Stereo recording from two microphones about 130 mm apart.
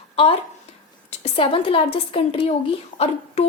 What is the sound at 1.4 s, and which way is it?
Speech, 45° left (ahead or behind).